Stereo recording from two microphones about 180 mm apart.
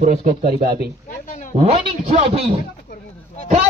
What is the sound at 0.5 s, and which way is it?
Speech, 60° right (ahead or behind).